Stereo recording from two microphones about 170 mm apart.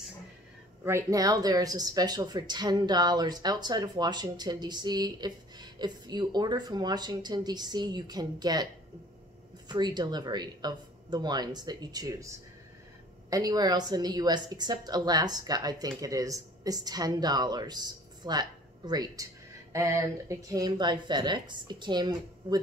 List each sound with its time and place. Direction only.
0.8 s speech: 20° right (ahead or behind)
9.7 s speech: 25° right (ahead or behind)
13.3 s speech: 20° right (ahead or behind)